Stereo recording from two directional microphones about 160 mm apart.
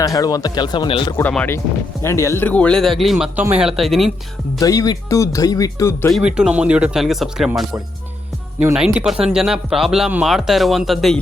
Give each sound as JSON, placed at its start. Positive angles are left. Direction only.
{"t": 0.0, "sound": "speech", "side_deg": 20}
{"t": 1.1, "sound": "speech", "side_deg": 10}
{"t": 4.6, "sound": "speech", "side_deg": 20}
{"t": 6.1, "sound": "speech", "side_deg": -5}
{"t": 8.7, "sound": "speech", "side_deg": -5}